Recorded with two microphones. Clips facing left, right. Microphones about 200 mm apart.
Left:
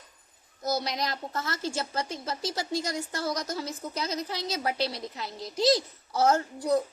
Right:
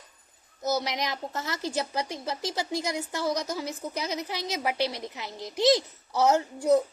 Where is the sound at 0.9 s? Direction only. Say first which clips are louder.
Even; 15° right (ahead or behind).